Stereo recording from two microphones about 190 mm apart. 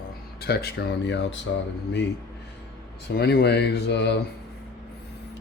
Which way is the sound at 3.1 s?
55° left (ahead or behind).